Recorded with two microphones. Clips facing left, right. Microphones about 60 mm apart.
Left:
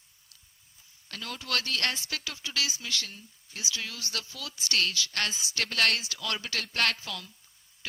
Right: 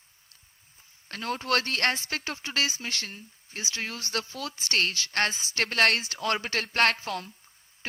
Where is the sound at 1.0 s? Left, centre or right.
Right.